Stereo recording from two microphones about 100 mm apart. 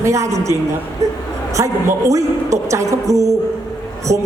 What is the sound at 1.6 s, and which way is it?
A woman's voice, 30° right (ahead or behind).